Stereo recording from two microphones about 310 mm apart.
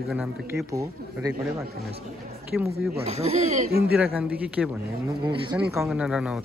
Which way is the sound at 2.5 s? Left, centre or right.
Centre.